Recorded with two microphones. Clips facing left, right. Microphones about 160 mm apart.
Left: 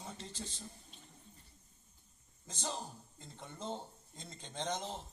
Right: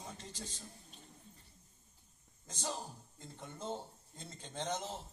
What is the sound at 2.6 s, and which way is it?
Speech, 10° right (ahead or behind).